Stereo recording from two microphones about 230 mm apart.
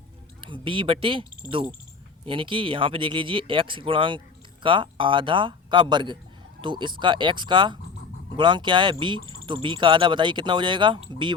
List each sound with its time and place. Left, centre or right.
0.4 s speech: right